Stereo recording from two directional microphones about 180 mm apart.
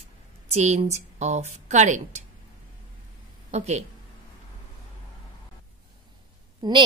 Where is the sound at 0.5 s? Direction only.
40° right (ahead or behind).